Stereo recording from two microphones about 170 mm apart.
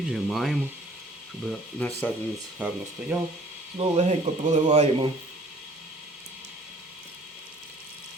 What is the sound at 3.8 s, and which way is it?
Speech, 40° right (ahead or behind).